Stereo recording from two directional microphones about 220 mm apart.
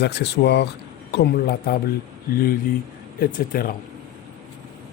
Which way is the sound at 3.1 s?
40° left (ahead or behind).